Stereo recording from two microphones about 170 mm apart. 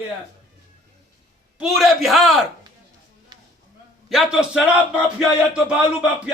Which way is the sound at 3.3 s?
25° right (ahead or behind).